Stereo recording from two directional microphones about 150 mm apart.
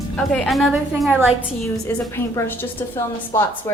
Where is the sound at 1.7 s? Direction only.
20° left (ahead or behind).